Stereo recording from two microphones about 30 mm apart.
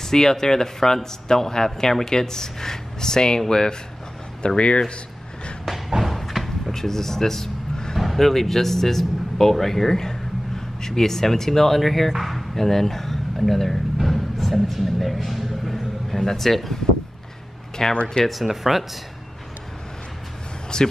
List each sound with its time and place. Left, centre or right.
0.0 s speech: centre
4.6 s speech: left
5.7 s slam: centre
6.1 s a sound: centre
6.7 s speech: centre
8.0 s vehicle: centre
8.3 s a man's voice: centre
11.8 s speech: centre
12.5 s speech: centre
14.0 s a sound: centre
16.1 s a man's voice: centre
17.8 s a man's voice: centre
18.2 s speech: centre
20.7 s speech: left